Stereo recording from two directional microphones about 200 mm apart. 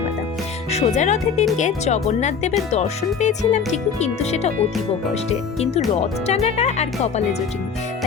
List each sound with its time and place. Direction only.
0.7 s speech: 35° left (ahead or behind)